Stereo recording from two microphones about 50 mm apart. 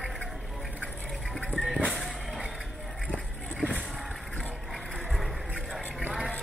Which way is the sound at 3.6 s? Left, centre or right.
Centre.